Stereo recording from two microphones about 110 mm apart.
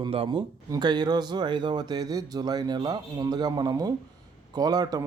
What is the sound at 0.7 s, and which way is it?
Speech, 40° right (ahead or behind).